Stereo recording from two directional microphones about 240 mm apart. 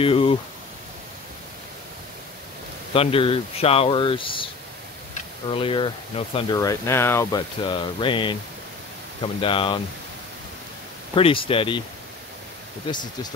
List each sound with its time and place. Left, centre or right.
0.0 s speech: left
2.9 s speech: left
5.5 s speech: left
11.1 s speech: left
12.8 s speech: centre